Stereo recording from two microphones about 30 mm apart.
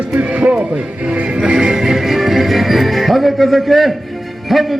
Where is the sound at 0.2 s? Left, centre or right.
Right.